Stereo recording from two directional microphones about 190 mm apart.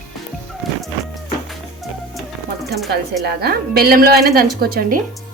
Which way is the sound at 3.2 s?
55° right (ahead or behind).